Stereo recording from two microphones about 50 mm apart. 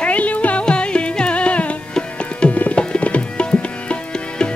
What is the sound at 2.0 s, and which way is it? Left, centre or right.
Tabla, left.